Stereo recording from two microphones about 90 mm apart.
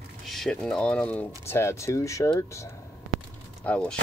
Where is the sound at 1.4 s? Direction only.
30° left (ahead or behind).